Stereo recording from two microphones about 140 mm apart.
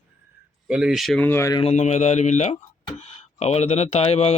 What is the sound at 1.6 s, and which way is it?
Speech, 50° left (ahead or behind).